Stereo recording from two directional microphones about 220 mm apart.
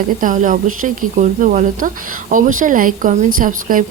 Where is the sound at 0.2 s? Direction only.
35° right (ahead or behind).